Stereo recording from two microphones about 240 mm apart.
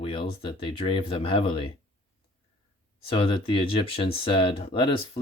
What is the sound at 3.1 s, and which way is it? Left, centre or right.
Speech, left.